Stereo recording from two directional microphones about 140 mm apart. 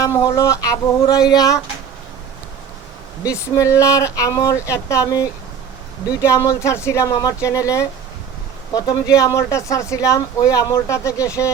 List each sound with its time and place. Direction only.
0.0 s speech: 25° left (ahead or behind)
3.2 s speech: 25° left (ahead or behind)